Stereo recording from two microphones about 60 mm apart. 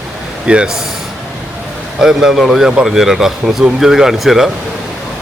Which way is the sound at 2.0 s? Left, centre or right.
Centre.